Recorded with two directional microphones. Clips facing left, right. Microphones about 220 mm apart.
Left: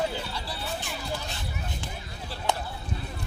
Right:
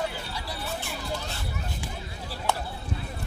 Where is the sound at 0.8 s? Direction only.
15° left (ahead or behind).